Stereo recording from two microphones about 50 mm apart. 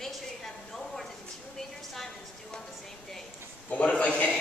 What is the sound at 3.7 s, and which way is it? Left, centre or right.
Speech, left.